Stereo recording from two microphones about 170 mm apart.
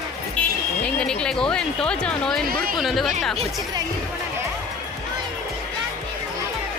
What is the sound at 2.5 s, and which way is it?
Speech, 60° right (ahead or behind).